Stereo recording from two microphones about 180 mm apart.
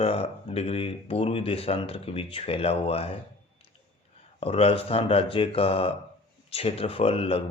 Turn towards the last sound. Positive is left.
turn(degrees=35)  # may be behind; listen again after turning